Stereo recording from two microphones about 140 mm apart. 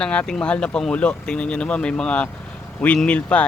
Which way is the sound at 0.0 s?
5° left (ahead or behind).